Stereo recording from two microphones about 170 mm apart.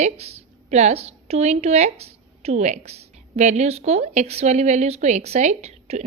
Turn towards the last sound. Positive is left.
turn(degrees=-40)  # may be behind; listen again after turning